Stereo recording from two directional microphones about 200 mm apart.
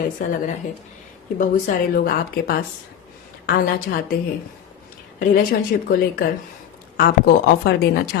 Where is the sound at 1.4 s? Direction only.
45° left (ahead or behind).